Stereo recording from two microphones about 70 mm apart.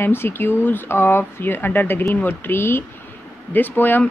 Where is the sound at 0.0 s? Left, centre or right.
Left.